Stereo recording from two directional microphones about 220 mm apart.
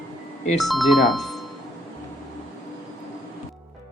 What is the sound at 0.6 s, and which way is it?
Speech, centre (ahead or behind).